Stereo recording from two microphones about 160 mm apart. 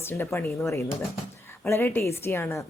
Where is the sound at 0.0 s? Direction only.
15° left (ahead or behind).